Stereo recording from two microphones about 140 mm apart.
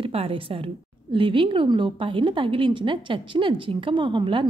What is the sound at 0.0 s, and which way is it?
A woman's voice, 40° right (ahead or behind).